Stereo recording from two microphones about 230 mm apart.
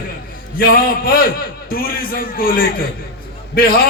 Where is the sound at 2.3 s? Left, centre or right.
Left.